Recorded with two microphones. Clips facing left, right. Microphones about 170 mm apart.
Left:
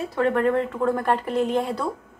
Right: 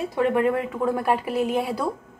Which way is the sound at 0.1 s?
15° right (ahead or behind).